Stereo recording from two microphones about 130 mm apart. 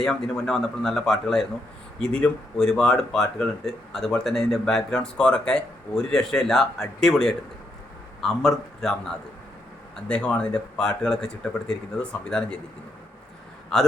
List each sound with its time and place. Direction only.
0.0 s speech: 5° left (ahead or behind)
13.7 s speech: 5° left (ahead or behind)